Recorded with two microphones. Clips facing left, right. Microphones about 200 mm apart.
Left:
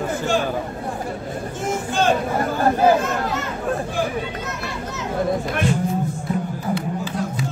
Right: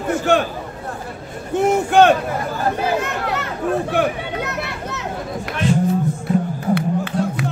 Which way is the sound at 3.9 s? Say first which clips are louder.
Right 4 dB; 65° right (ahead or behind).